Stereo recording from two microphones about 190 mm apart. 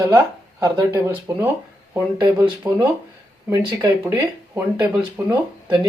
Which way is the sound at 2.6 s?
20° right (ahead or behind).